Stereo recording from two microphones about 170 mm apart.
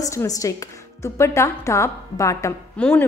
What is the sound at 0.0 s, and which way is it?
A woman's voice, 20° left (ahead or behind).